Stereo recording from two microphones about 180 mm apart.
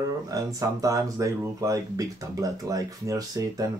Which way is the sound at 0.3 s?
20° right (ahead or behind).